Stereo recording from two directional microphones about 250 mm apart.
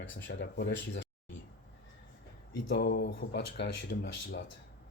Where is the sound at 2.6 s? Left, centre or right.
Left.